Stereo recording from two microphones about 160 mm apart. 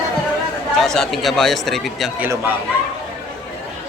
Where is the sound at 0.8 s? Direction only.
5° left (ahead or behind).